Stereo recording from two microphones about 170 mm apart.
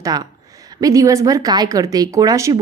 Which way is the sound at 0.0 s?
20° right (ahead or behind).